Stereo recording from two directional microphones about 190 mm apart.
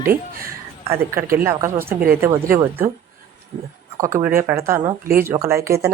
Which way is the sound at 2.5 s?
10° right (ahead or behind).